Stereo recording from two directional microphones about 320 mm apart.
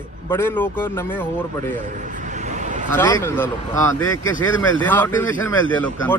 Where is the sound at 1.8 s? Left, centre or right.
Right.